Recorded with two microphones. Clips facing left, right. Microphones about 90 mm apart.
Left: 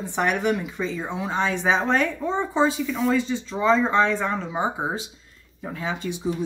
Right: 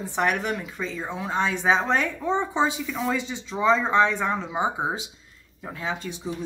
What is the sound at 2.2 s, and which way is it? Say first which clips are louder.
Speech: right 1 dB; 15° right (ahead or behind).